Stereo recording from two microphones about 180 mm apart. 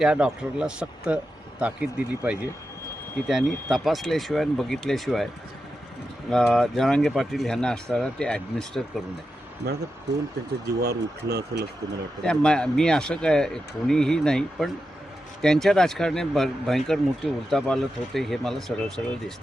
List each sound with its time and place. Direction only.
0.0 s speech: 5° right (ahead or behind)
6.3 s speech: centre (ahead or behind)
9.6 s speech: 65° right (ahead or behind)
12.2 s speech: 5° left (ahead or behind)